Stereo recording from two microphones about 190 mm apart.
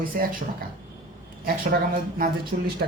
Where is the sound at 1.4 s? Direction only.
50° right (ahead or behind).